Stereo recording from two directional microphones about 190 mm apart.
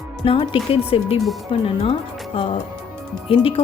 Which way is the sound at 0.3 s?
30° left (ahead or behind).